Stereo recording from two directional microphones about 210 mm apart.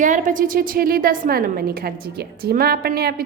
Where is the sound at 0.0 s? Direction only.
40° right (ahead or behind).